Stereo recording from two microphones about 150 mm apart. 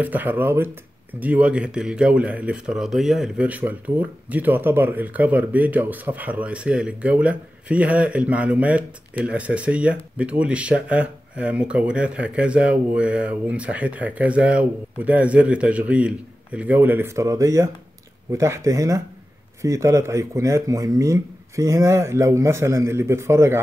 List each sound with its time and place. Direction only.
0.0 s speech: 10° right (ahead or behind)